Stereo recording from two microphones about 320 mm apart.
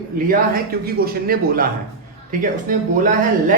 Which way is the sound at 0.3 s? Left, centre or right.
Right.